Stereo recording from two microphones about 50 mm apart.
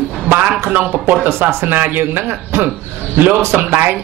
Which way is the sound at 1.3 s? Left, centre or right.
Right.